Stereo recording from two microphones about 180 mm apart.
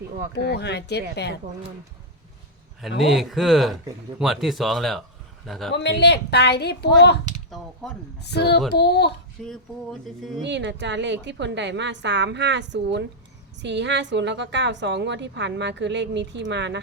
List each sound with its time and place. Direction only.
0.3 s a woman's voice: 70° left (ahead or behind)
3.0 s speech: centre (ahead or behind)
5.7 s a woman's voice: 70° left (ahead or behind)
8.2 s a woman's voice: 70° left (ahead or behind)
9.4 s speech: centre (ahead or behind)
10.4 s a woman's voice: 80° right